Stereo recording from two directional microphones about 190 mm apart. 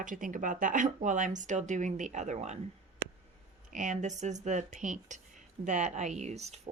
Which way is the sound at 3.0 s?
75° right (ahead or behind).